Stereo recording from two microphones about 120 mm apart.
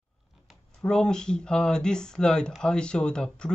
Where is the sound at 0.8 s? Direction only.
5° left (ahead or behind).